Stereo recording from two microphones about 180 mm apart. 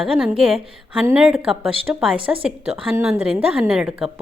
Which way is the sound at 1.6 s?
30° right (ahead or behind).